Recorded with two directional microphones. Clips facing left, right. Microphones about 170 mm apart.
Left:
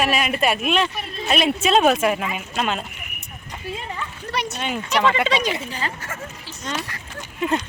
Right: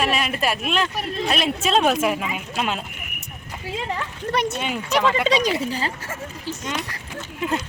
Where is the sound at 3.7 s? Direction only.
90° right.